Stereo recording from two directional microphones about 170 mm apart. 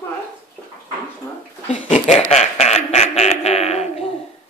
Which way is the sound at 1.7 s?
45° left (ahead or behind).